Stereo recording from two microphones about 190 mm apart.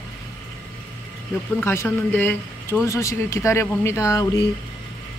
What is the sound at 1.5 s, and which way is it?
Speech, 10° left (ahead or behind).